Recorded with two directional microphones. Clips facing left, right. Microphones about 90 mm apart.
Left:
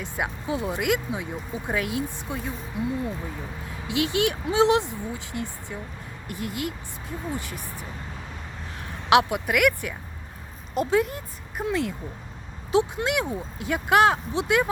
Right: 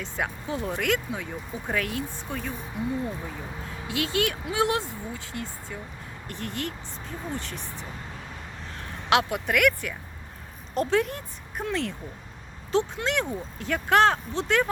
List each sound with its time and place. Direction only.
0.0 s speech: 15° left (ahead or behind)
3.8 s speech: 20° left (ahead or behind)
9.0 s speech: 15° left (ahead or behind)
10.8 s speech: 5° left (ahead or behind)